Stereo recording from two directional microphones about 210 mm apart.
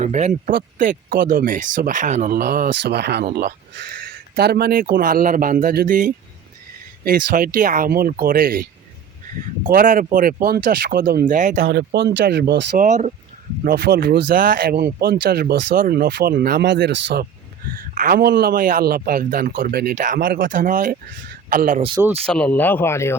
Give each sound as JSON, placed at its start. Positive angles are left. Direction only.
{"t": 0.0, "sound": "speech", "side_deg": -35}
{"t": 9.6, "sound": "speech", "side_deg": -40}
{"t": 13.7, "sound": "speech", "side_deg": -50}
{"t": 17.7, "sound": "speech", "side_deg": -40}
{"t": 22.3, "sound": "speech", "side_deg": 5}